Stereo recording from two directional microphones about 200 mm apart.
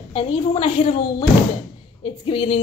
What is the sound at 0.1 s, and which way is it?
Speech, 30° left (ahead or behind).